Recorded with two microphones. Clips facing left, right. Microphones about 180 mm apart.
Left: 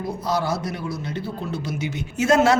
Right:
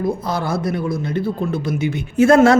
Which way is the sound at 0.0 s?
55° right (ahead or behind).